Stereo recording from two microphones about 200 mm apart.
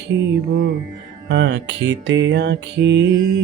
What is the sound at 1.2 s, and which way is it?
Mantra, 60° right (ahead or behind).